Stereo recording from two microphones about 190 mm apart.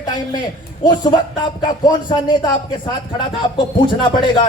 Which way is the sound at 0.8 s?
20° left (ahead or behind).